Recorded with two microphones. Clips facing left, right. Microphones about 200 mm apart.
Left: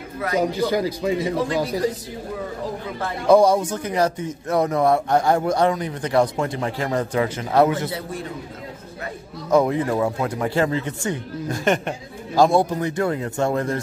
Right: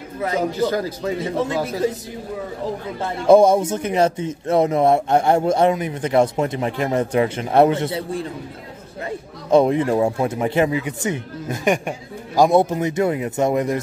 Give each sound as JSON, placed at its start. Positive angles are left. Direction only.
{"t": 0.4, "sound": "a man's voice", "side_deg": 10}
{"t": 3.0, "sound": "speech", "side_deg": -25}
{"t": 9.5, "sound": "speech", "side_deg": -25}